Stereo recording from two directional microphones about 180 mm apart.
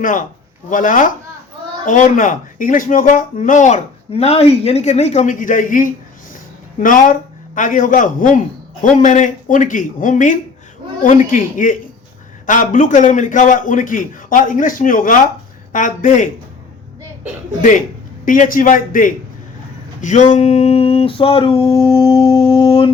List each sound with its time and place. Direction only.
0.0 s speech: 45° left (ahead or behind)
17.6 s speech: 45° left (ahead or behind)
20.0 s a sound: 45° left (ahead or behind)